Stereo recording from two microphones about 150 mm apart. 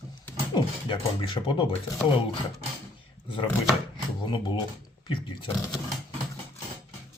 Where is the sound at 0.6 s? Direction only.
35° left (ahead or behind).